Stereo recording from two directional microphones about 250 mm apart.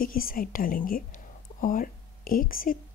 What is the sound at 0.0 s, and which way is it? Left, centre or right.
A woman's voice, left.